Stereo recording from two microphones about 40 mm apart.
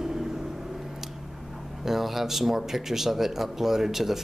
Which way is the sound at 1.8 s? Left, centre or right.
Centre.